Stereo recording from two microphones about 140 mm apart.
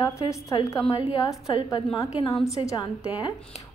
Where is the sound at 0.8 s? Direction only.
40° left (ahead or behind).